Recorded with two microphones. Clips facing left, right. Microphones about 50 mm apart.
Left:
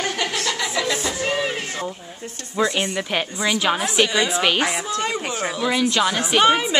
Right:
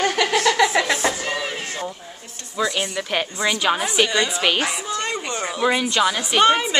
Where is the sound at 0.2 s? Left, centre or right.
Right.